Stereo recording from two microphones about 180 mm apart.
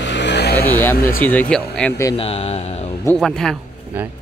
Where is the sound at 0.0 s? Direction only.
75° left (ahead or behind).